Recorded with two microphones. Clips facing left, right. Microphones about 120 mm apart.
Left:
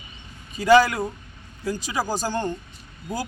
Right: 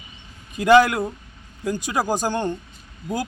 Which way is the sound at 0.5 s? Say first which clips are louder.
Right 2 dB; 60° right (ahead or behind).